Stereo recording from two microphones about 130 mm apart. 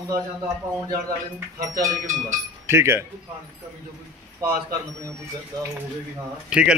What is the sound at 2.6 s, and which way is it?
Speech, 20° right (ahead or behind).